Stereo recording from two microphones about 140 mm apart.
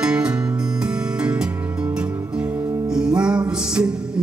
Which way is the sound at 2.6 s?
25° right (ahead or behind).